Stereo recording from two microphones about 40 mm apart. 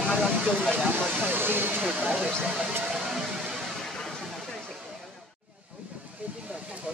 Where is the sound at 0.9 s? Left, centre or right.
Right.